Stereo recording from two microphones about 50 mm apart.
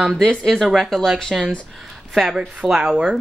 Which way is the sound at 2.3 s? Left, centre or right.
Centre.